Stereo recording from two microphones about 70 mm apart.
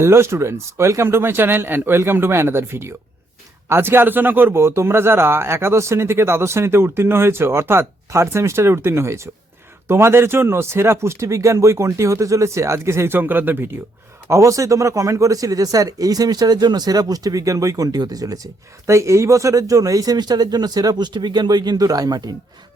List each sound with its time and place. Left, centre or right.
0.0 s speech: right
13.1 s speech: right
14.3 s speech: right
18.9 s speech: right